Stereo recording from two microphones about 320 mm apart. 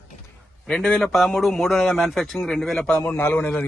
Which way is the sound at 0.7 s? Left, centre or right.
Centre.